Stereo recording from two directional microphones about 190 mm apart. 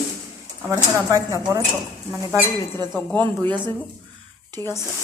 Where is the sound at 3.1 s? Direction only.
25° right (ahead or behind).